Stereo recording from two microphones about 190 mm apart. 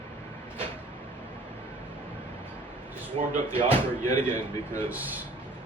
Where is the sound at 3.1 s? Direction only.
30° right (ahead or behind).